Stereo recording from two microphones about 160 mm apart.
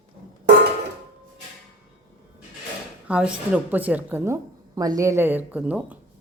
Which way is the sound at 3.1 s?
5° right (ahead or behind).